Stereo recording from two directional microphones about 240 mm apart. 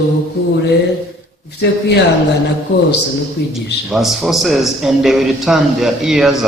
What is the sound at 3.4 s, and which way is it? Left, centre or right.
Speech, left.